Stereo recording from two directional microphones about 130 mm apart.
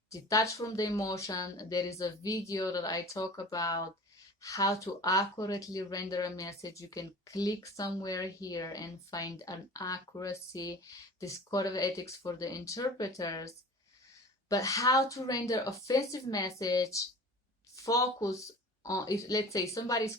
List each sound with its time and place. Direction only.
0.1 s speech: 25° left (ahead or behind)
14.5 s speech: 25° left (ahead or behind)